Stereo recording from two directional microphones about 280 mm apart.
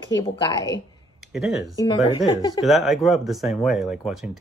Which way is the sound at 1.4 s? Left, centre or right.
Centre.